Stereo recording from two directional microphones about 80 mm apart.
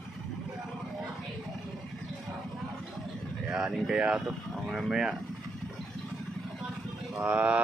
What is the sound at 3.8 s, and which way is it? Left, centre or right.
Speech, centre.